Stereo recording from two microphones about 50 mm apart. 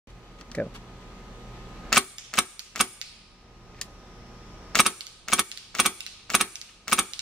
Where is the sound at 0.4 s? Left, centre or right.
Left.